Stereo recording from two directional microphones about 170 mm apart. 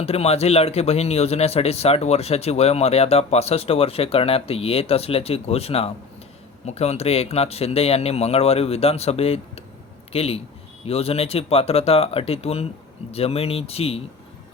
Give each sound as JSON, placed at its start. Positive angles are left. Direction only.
{"t": 0.0, "sound": "speech", "side_deg": 35}